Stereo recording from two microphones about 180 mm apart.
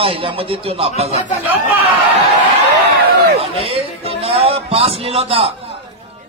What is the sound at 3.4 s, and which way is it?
A man's voice, 30° right (ahead or behind).